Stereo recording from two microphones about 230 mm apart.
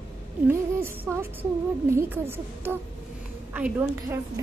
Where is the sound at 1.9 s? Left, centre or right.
Centre.